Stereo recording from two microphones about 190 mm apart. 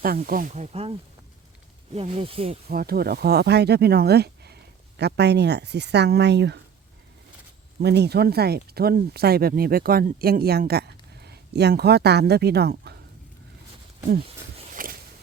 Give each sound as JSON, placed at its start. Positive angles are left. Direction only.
{"t": 0.0, "sound": "speech", "side_deg": -50}
{"t": 2.6, "sound": "speech", "side_deg": -55}
{"t": 7.8, "sound": "speech", "side_deg": -60}
{"t": 14.7, "sound": "a sound", "side_deg": -45}